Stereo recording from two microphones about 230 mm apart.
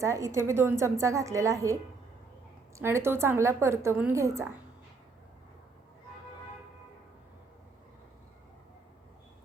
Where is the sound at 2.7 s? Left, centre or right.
Centre.